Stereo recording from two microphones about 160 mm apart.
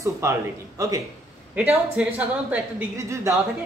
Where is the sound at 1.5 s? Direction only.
10° right (ahead or behind).